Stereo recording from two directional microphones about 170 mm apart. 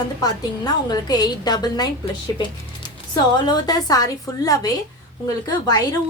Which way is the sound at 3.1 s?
25° left (ahead or behind).